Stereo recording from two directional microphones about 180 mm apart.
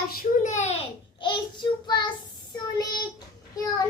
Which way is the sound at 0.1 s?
50° left (ahead or behind).